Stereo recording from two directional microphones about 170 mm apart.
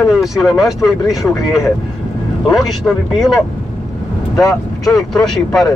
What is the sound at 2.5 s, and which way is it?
Speech, centre (ahead or behind).